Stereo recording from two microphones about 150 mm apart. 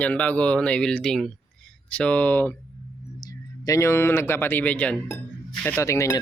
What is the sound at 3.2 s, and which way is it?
Speech, 25° left (ahead or behind).